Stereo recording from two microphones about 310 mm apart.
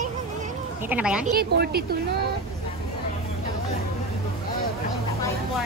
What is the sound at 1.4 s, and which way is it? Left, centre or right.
Speech, right.